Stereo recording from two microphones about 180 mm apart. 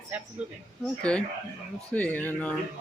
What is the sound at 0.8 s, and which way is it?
Speech, 5° left (ahead or behind).